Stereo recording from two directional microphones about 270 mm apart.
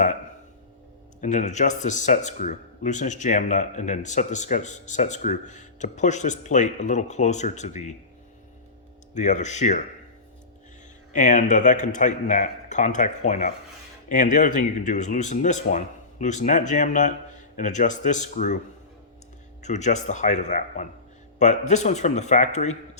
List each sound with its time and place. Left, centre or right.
1.2 s speech: left
9.1 s speech: left
11.1 s speech: left
19.6 s speech: left